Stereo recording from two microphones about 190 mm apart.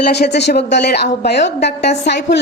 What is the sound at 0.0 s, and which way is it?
A woman's voice, 55° left (ahead or behind).